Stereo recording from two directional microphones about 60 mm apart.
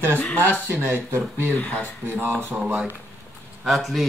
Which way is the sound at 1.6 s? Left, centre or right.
Left.